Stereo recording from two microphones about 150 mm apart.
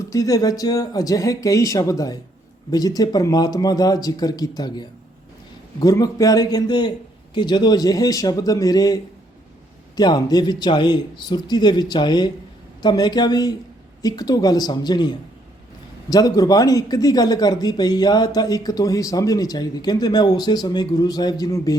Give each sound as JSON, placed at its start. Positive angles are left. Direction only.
{"t": 0.1, "sound": "speech", "side_deg": 20}